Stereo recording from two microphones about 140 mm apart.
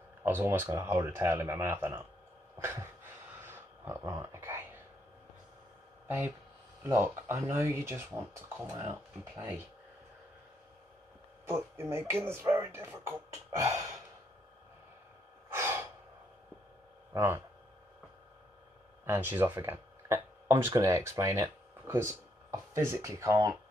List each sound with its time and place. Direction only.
0.2 s speech: 15° right (ahead or behind)
3.4 s a sound: 15° right (ahead or behind)
6.0 s speech: 15° right (ahead or behind)
11.4 s speech: 20° right (ahead or behind)
13.6 s sigh: 20° right (ahead or behind)
15.5 s breathing: 20° right (ahead or behind)
17.1 s speech: 25° right (ahead or behind)
19.0 s speech: 15° right (ahead or behind)